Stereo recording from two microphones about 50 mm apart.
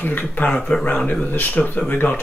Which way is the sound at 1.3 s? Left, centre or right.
Left.